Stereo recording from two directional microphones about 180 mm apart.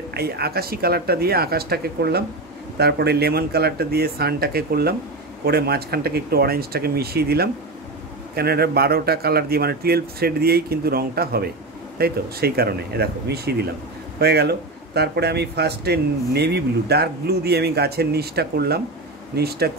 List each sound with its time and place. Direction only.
0.1 s speech: 60° right (ahead or behind)